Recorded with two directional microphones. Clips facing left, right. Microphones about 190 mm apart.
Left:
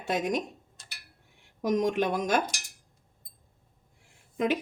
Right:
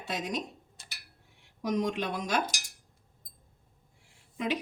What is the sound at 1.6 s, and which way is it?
Speech, 45° left (ahead or behind).